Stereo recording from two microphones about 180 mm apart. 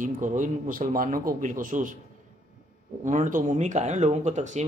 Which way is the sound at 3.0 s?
45° right (ahead or behind).